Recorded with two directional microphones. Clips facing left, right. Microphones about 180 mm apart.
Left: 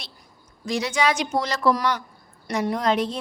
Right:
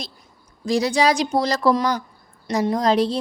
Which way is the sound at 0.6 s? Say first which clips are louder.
Right 5 dB; 35° right (ahead or behind).